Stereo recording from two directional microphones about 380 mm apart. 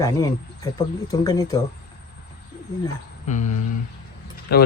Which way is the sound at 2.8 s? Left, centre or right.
Centre.